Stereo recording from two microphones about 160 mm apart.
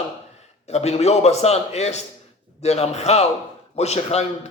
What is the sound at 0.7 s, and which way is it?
A man's voice, 40° left (ahead or behind).